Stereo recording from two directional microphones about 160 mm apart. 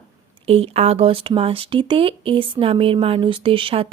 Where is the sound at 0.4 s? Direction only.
40° right (ahead or behind).